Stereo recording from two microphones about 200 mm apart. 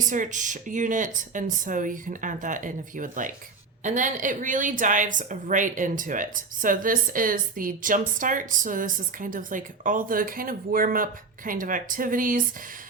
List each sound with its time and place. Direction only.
0.1 s speech: 40° right (ahead or behind)